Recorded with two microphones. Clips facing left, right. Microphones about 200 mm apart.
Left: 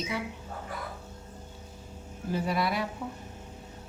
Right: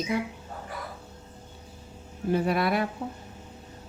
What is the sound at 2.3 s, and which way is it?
Speech, 60° right (ahead or behind).